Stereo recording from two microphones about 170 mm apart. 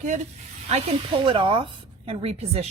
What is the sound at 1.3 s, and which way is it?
A woman's voice, 30° right (ahead or behind).